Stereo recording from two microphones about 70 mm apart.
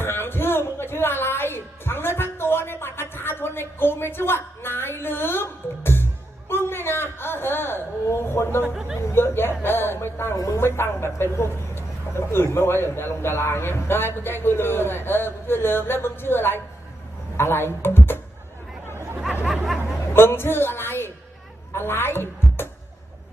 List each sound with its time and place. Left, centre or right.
0.0 s music: left
6.5 s a sound: left
8.7 s speech: centre
9.0 s a man's voice: left
10.3 s speech: left
10.8 s a man's voice: left
19.5 s a sound: centre
20.1 s a woman's voice: left